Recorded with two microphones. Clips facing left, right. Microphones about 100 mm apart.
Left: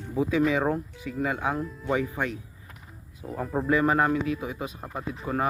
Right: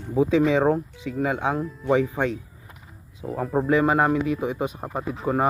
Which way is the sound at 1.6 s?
5° right (ahead or behind).